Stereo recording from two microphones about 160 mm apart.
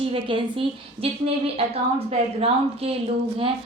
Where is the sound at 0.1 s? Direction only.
35° right (ahead or behind).